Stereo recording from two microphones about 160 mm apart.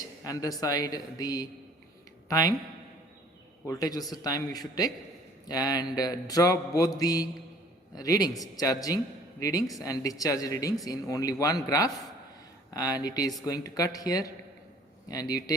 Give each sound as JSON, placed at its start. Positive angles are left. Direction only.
{"t": 0.3, "sound": "mantra", "side_deg": 20}
{"t": 3.7, "sound": "mantra", "side_deg": 25}